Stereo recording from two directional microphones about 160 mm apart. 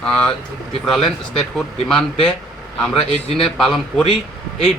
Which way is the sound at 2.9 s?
35° left (ahead or behind).